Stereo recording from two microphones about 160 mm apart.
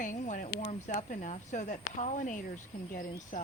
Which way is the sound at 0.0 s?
55° left (ahead or behind).